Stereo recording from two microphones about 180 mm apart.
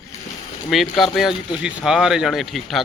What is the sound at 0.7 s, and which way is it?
Speech, centre (ahead or behind).